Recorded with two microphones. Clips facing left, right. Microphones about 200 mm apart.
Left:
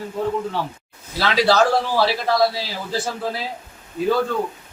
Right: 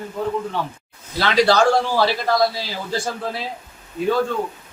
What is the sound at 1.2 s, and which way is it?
A man's voice, 5° left (ahead or behind).